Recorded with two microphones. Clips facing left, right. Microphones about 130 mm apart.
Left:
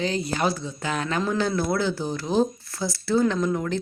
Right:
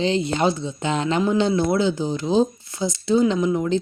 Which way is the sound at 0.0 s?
25° right (ahead or behind).